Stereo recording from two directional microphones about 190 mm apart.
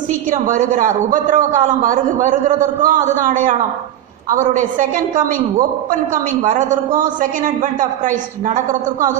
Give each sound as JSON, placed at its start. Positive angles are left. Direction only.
{"t": 0.3, "sound": "a man's voice", "side_deg": -45}